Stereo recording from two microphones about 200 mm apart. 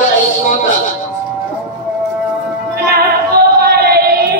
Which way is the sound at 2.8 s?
50° right (ahead or behind).